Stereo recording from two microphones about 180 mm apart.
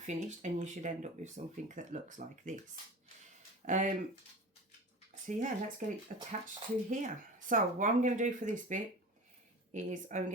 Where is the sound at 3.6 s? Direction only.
45° right (ahead or behind).